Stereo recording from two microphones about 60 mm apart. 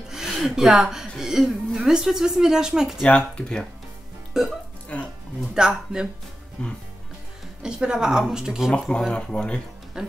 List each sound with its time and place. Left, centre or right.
0.1 s a woman's voice: centre
3.0 s speech: centre
4.4 s a woman's voice: centre
4.9 s music: left
5.5 s a woman's voice: centre
6.6 s speech: centre
7.6 s a woman's voice: centre
9.1 s speech: centre
9.9 s speech: centre